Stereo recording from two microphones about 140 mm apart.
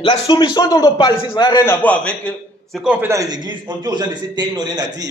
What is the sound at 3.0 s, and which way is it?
A man's voice, 25° right (ahead or behind).